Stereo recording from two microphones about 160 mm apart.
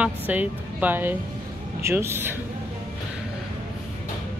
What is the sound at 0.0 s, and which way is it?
A man's voice, 10° right (ahead or behind).